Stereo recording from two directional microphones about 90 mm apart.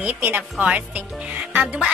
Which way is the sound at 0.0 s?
20° right (ahead or behind).